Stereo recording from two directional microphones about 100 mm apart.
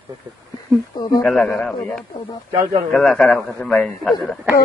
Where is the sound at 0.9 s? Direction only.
45° left (ahead or behind).